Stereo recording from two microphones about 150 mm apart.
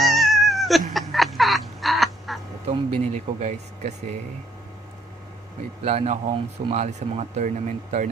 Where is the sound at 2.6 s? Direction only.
50° right (ahead or behind).